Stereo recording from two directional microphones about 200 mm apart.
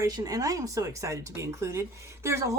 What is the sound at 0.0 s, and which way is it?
A woman's voice, 15° right (ahead or behind).